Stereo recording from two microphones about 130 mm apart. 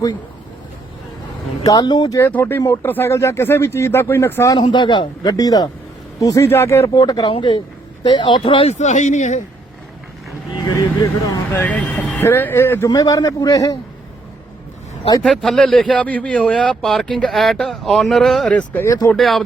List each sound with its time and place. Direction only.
1.6 s speech: 30° left (ahead or behind)
4.6 s a man's voice: 35° left (ahead or behind)
7.0 s a man's voice: 35° left (ahead or behind)
8.8 s speech: 65° left (ahead or behind)
10.6 s speech: 25° left (ahead or behind)
11.5 s speech: 10° left (ahead or behind)
12.9 s speech: 30° left (ahead or behind)
15.2 s a man's voice: 5° left (ahead or behind)
18.9 s speech: 25° left (ahead or behind)
19.1 s a man's voice: centre (ahead or behind)